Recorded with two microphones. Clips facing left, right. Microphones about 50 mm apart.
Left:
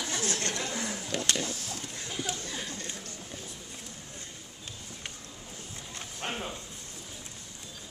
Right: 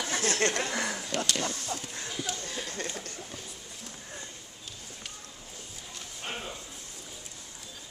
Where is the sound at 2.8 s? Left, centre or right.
Right.